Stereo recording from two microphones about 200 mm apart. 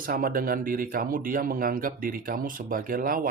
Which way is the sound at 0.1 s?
45° right (ahead or behind).